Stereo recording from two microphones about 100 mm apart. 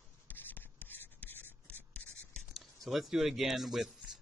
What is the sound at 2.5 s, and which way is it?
Speech, centre (ahead or behind).